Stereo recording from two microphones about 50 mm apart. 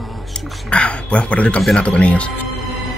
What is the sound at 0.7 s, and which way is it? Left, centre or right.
Speech, left.